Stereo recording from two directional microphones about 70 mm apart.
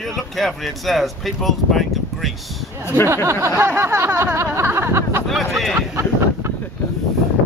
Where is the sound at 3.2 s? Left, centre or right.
Right.